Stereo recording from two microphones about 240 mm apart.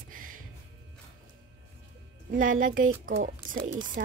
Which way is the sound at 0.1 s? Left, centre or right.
Right.